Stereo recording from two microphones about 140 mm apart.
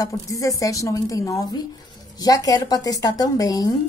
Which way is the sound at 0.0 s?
25° left (ahead or behind).